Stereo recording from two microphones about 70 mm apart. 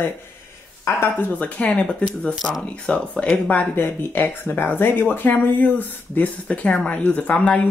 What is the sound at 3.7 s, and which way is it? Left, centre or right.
Speech, left.